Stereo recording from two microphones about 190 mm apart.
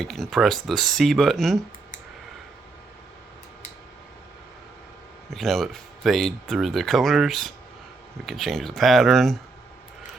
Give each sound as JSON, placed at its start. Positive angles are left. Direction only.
{"t": 0.0, "sound": "speech", "side_deg": 0}
{"t": 5.3, "sound": "speech", "side_deg": 0}